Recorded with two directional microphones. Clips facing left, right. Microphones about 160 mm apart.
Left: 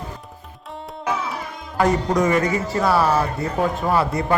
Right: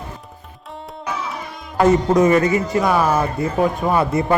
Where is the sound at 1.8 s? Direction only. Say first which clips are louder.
Right 5 dB; 25° right (ahead or behind).